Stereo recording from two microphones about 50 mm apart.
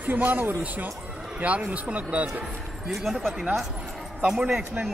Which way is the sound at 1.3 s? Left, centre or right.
Right.